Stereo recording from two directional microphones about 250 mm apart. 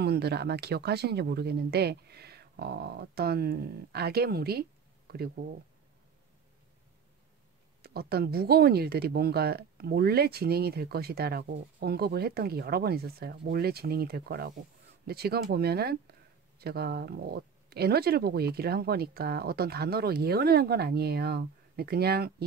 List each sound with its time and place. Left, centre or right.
0.0 s speech: right
7.8 s speech: right